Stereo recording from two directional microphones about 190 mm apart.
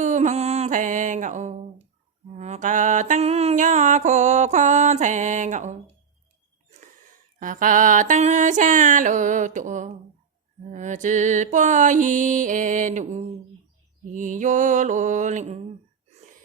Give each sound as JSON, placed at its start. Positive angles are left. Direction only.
{"t": 0.0, "sound": "mantra", "side_deg": -40}
{"t": 7.3, "sound": "music", "side_deg": -45}